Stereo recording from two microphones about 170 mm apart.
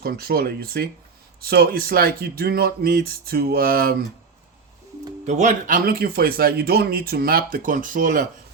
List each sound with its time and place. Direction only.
0.0 s speech: 65° right (ahead or behind)
5.2 s speech: 45° right (ahead or behind)